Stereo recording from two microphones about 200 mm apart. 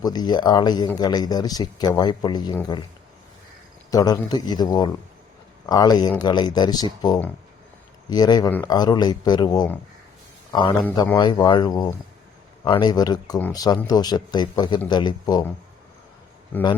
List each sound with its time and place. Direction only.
0.0 s speech: 20° left (ahead or behind)
3.9 s speech: 20° left (ahead or behind)
16.5 s speech: 10° left (ahead or behind)